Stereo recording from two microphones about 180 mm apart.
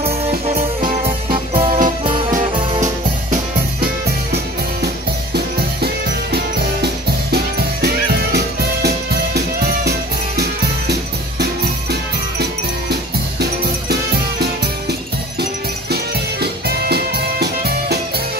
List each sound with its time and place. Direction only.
0.0 s music: 35° right (ahead or behind)
4.8 s music: 65° right (ahead or behind)
14.4 s music: 65° right (ahead or behind)